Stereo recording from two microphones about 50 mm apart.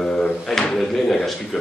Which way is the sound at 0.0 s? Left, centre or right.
Centre.